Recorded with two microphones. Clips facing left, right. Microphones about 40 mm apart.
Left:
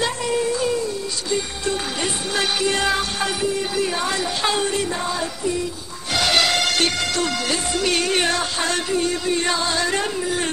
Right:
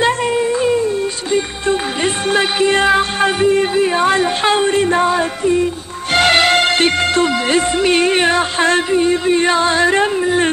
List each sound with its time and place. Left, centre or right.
0.0 s music: right